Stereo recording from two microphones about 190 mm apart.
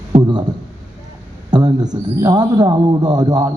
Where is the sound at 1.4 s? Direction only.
20° right (ahead or behind).